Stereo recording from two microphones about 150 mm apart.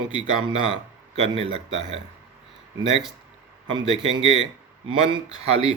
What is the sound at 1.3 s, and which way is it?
Speech, 40° right (ahead or behind).